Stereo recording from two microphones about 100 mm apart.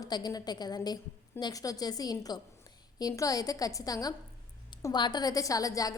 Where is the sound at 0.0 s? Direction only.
45° left (ahead or behind).